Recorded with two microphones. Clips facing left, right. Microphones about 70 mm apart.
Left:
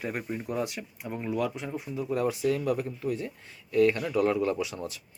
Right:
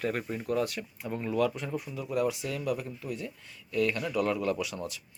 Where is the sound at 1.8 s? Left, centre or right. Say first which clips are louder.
Left 2 dB; left.